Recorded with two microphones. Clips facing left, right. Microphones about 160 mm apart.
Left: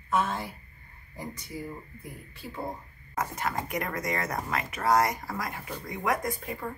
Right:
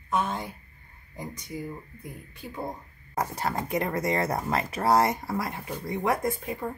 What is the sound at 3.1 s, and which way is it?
Speech, 35° right (ahead or behind).